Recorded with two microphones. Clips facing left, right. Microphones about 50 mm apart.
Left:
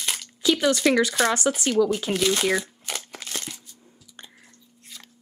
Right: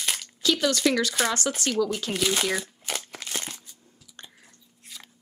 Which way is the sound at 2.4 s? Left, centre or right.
Centre.